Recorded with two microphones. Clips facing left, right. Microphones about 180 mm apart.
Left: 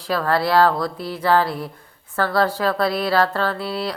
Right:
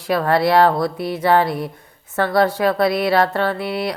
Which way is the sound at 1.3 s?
20° right (ahead or behind).